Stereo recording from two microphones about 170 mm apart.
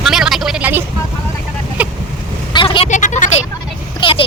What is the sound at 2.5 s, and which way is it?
Vehicle, 30° left (ahead or behind).